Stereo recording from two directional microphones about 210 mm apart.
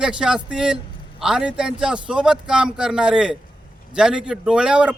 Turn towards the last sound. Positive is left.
turn(degrees=-5)  # may be behind; listen again after turning